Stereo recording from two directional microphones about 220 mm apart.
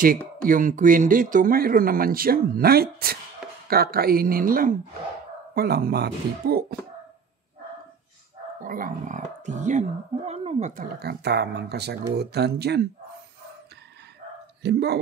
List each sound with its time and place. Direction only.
0.4 s speech: 40° right (ahead or behind)
8.6 s speech: 40° right (ahead or behind)
14.6 s speech: 50° right (ahead or behind)